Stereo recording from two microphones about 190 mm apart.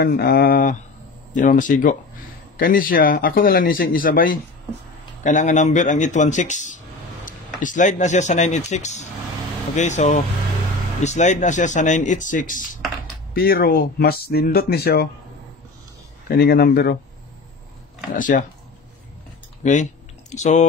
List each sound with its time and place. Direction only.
0.0 s speech: 55° left (ahead or behind)
16.3 s speech: 55° left (ahead or behind)
18.1 s speech: 45° left (ahead or behind)
19.6 s typing: 40° left (ahead or behind)